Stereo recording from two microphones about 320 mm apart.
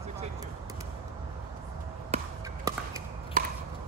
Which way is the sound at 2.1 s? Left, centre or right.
Centre.